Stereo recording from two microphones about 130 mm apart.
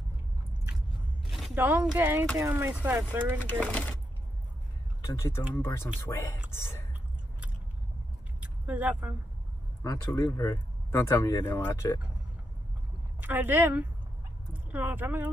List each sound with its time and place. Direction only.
1.5 s speech: 15° right (ahead or behind)
3.6 s speech: 10° left (ahead or behind)
5.1 s speech: 20° left (ahead or behind)
8.4 s vehicle: 10° right (ahead or behind)
9.8 s speech: 25° left (ahead or behind)
13.2 s speech: 15° right (ahead or behind)